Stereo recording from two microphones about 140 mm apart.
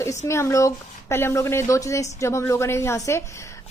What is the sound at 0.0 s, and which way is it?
A woman's voice, 20° left (ahead or behind).